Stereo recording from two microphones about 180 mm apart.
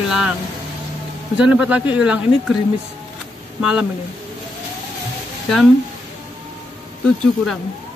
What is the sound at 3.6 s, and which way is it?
Speech, 5° right (ahead or behind).